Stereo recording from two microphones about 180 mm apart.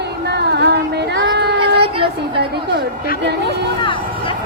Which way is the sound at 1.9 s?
30° right (ahead or behind).